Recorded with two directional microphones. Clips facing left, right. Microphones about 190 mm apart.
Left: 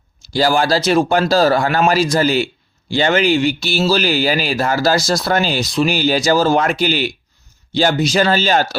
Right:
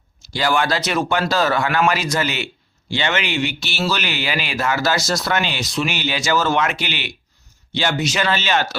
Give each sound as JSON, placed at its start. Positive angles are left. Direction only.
{"t": 0.3, "sound": "speech", "side_deg": 35}